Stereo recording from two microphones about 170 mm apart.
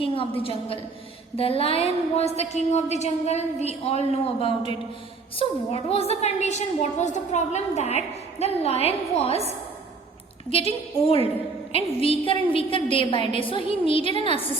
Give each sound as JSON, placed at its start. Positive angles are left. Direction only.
{"t": 0.0, "sound": "a woman's voice", "side_deg": 30}
{"t": 1.4, "sound": "a woman's voice", "side_deg": 35}
{"t": 10.5, "sound": "a woman's voice", "side_deg": 35}